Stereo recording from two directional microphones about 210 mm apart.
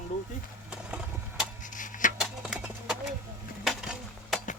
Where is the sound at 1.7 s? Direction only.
40° left (ahead or behind).